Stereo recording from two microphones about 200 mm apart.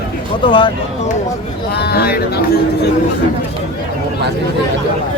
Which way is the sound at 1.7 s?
55° left (ahead or behind).